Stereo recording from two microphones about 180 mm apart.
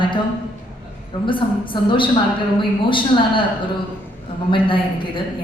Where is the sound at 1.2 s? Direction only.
25° left (ahead or behind).